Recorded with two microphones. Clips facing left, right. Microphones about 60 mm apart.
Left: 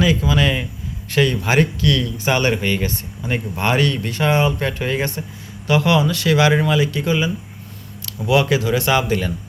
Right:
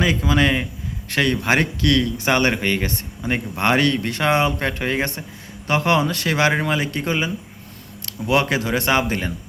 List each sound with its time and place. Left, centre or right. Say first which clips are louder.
0.0 s speech: left 1 dB; right
1.1 s speech: left 2 dB; right
5.6 s speech: left 2 dB; right